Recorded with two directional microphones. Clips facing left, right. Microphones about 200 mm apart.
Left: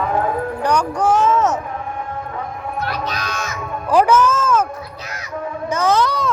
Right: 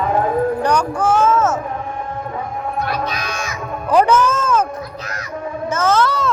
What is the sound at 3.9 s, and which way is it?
Music, 5° left (ahead or behind).